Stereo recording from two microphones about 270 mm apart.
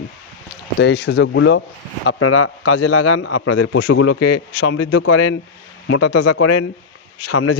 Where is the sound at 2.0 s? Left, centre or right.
Left.